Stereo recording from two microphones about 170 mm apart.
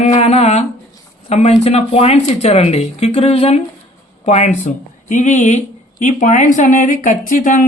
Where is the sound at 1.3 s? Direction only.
40° left (ahead or behind).